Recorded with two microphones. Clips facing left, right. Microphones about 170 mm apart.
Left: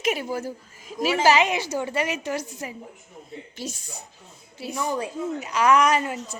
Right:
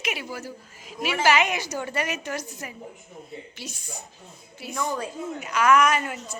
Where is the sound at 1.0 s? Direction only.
35° left (ahead or behind).